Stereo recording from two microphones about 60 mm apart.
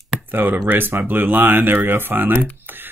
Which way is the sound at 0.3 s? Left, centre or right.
Right.